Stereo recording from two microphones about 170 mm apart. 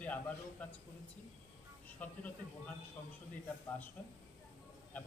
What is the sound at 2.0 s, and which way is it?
Speech, 10° left (ahead or behind).